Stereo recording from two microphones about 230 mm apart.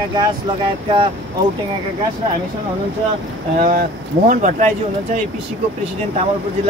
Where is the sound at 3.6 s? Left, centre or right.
Right.